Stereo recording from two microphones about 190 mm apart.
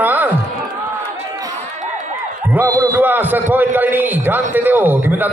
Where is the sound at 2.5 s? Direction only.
15° right (ahead or behind).